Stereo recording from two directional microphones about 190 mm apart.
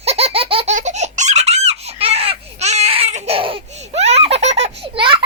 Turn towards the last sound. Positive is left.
turn(degrees=-25)  # may be behind; listen again after turning